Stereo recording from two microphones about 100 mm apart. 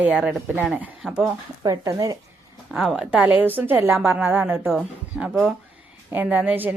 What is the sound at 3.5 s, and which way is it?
A woman's voice, 20° right (ahead or behind).